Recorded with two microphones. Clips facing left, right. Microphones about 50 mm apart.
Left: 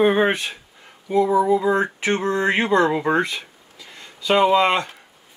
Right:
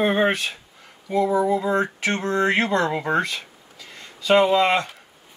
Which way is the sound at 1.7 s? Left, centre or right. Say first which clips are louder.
Left 2 dB; centre.